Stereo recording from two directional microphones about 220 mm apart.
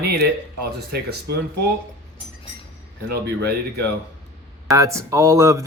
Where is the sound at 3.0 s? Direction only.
45° right (ahead or behind).